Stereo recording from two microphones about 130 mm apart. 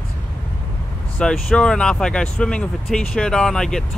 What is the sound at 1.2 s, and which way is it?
Speech, 5° left (ahead or behind).